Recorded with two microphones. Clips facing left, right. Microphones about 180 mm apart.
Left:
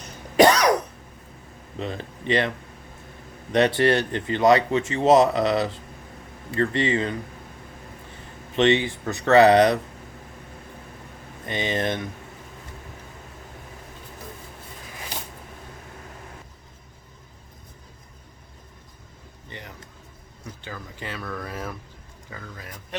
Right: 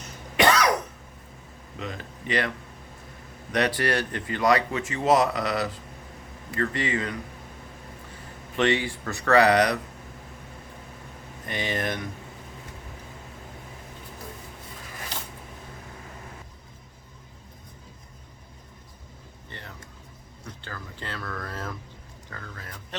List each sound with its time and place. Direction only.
0.3 s cough: 35° left (ahead or behind)
1.8 s speech: 30° left (ahead or behind)
3.5 s speech: 25° left (ahead or behind)
8.5 s speech: 20° left (ahead or behind)
11.4 s speech: 20° left (ahead or behind)
19.5 s vehicle: 15° left (ahead or behind)
20.6 s speech: 15° left (ahead or behind)